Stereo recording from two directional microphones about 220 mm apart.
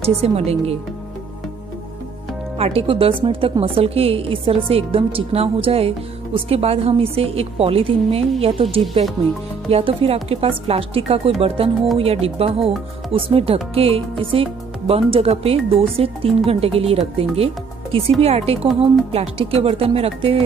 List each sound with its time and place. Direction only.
0.0 s a woman's voice: 25° right (ahead or behind)
2.6 s a woman's voice: 25° right (ahead or behind)
18.2 s a woman's voice: 25° right (ahead or behind)